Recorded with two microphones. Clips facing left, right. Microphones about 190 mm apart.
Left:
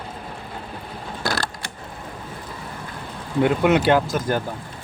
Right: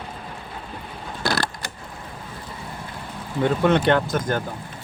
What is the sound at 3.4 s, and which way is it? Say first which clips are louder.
Speech: left 1 dB; 10° left (ahead or behind).